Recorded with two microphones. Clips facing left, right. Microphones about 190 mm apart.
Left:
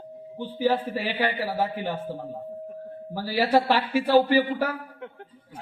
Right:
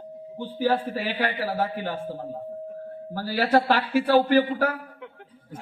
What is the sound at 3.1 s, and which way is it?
A man's voice, 10° left (ahead or behind).